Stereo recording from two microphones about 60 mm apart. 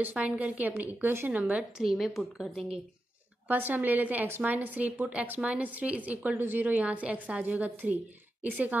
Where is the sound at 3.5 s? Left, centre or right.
Right.